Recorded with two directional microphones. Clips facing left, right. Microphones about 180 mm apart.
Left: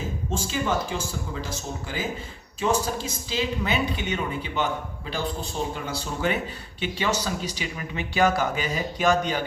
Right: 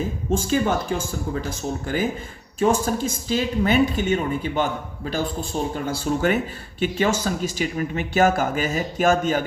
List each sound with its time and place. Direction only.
0.3 s speech: 50° right (ahead or behind)